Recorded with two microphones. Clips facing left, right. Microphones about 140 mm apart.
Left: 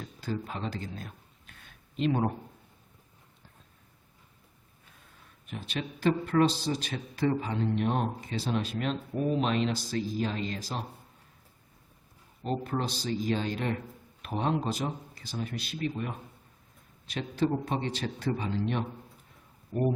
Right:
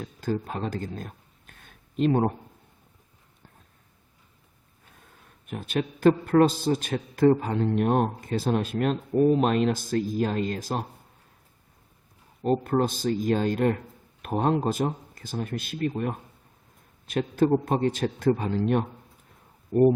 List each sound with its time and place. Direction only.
0.0 s speech: 45° right (ahead or behind)
5.5 s a man's voice: 50° right (ahead or behind)
12.4 s a man's voice: 50° right (ahead or behind)